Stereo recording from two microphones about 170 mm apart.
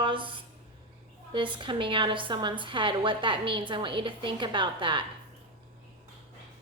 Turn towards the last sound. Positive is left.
turn(degrees=-30)  # may be behind; listen again after turning